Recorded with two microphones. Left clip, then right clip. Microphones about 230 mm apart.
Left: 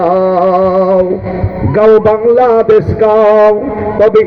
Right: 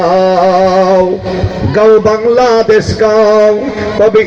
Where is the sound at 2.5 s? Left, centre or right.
Right.